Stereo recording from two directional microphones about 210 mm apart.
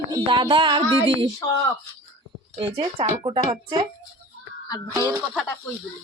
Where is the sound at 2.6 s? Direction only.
25° right (ahead or behind).